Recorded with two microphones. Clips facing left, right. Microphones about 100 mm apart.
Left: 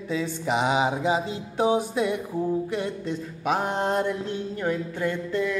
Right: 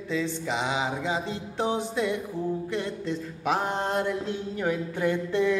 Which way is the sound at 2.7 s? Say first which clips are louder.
Left 1 dB; 5° left (ahead or behind).